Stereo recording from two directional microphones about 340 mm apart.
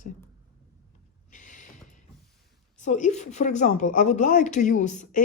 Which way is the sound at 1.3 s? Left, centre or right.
Left.